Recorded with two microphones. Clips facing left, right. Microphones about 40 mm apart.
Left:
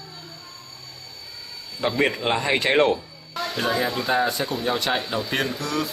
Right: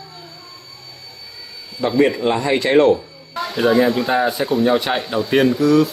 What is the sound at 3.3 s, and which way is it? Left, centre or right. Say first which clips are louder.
Speech: right 8 dB; centre.